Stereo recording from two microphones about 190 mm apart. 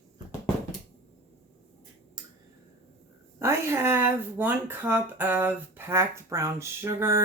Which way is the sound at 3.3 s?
15° right (ahead or behind).